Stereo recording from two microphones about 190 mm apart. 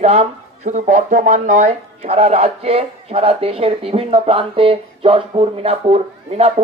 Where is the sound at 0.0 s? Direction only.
35° right (ahead or behind).